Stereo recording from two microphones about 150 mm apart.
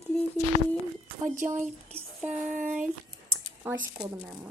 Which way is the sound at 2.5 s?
60° right (ahead or behind).